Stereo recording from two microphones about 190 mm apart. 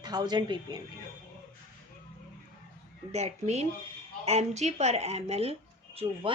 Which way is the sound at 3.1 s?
35° right (ahead or behind).